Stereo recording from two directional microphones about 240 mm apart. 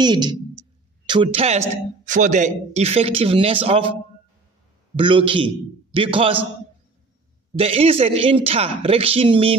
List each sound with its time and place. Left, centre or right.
0.0 s a sound: centre
2.0 s a man's voice: right
4.9 s a man's voice: right
7.5 s a man's voice: right